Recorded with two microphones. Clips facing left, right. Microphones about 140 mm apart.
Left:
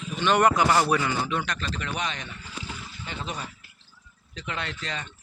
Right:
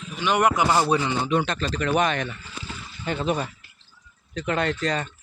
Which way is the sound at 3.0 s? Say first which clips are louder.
Right 10 dB; 55° right (ahead or behind).